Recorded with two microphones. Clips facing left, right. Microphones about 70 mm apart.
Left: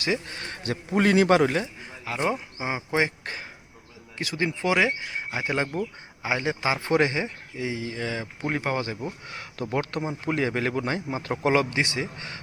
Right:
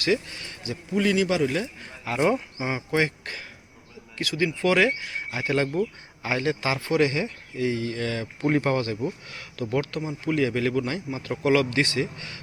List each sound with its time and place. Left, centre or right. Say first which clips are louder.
0.3 s speech: left 4 dB; left
2.0 s a man's voice: right 4 dB; centre; by 4.5 s left
4.6 s a man's voice: right 2 dB; centre
9.0 s a man's voice: right 3 dB; left